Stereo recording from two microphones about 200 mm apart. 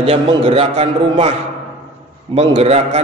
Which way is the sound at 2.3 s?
30° right (ahead or behind).